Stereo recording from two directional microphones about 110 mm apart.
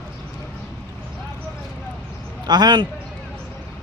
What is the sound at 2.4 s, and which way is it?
Speech, 40° right (ahead or behind).